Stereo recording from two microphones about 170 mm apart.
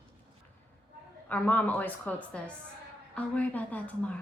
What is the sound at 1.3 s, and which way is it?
A woman's voice, 10° left (ahead or behind).